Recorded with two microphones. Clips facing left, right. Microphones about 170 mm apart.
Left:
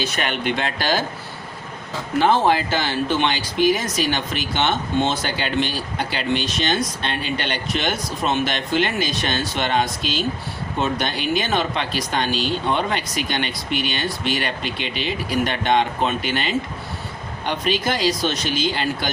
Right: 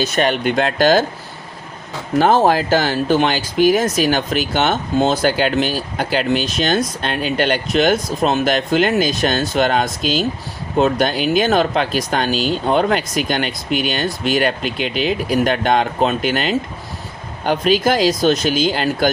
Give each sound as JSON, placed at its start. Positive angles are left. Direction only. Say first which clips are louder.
{"t": 0.0, "sound": "speech", "louder": "right 7 dB", "side_deg": -40}
{"t": 2.1, "sound": "speech", "louder": "right 4 dB", "side_deg": -40}